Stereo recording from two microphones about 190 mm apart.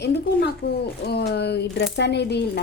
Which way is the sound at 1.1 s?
60° left (ahead or behind).